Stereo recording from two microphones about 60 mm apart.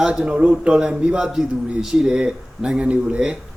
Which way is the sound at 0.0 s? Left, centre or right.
Centre.